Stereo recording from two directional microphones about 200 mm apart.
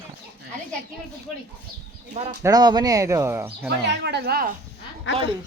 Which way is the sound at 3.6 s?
60° right (ahead or behind).